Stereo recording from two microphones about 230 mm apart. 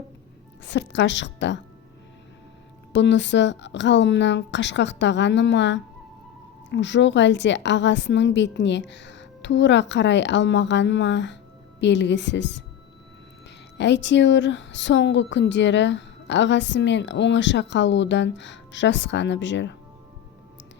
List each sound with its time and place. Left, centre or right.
0.6 s a woman's voice: left
2.9 s a woman's voice: left
13.7 s a woman's voice: left